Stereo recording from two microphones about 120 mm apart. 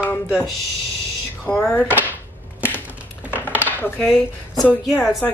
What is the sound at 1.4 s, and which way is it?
Speech, 15° left (ahead or behind).